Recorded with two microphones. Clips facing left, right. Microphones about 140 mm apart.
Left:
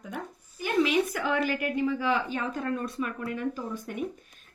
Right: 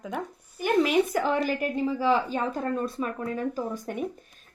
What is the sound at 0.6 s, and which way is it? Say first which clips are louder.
A woman's voice: right 3 dB; 50° right (ahead or behind).